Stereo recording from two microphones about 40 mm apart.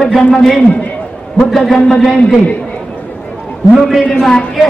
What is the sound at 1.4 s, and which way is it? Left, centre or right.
Speech, centre.